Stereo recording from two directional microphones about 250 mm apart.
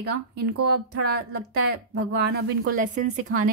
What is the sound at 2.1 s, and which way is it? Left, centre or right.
Speech, right.